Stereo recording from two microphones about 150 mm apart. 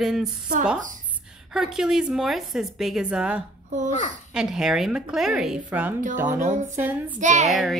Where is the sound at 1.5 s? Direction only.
Centre (ahead or behind).